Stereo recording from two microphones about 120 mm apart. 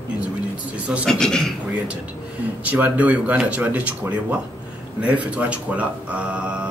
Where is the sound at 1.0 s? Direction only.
5° left (ahead or behind).